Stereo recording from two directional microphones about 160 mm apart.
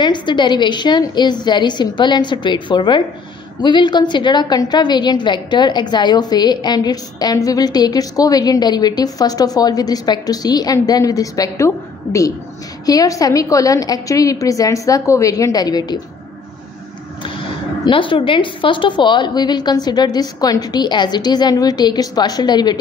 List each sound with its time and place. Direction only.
0.0 s a woman's voice: 30° left (ahead or behind)
17.8 s a woman's voice: 30° left (ahead or behind)